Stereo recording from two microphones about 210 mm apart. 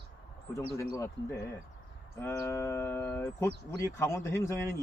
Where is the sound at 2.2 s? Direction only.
10° left (ahead or behind).